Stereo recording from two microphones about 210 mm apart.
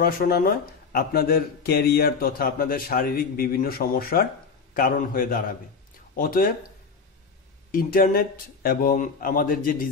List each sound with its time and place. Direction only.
0.0 s speech: 45° left (ahead or behind)
7.7 s speech: 45° left (ahead or behind)